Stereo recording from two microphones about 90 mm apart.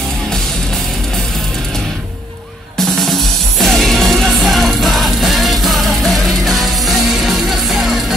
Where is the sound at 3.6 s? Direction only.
Centre (ahead or behind).